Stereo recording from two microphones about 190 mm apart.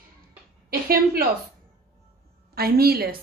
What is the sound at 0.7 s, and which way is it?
Speech, 50° right (ahead or behind).